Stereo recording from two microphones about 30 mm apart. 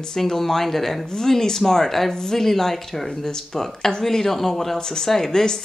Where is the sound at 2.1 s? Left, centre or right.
Centre.